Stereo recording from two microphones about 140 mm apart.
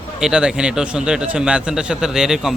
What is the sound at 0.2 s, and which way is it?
A man's voice, 5° right (ahead or behind).